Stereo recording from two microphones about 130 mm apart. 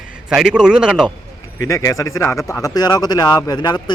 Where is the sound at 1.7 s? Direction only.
25° left (ahead or behind).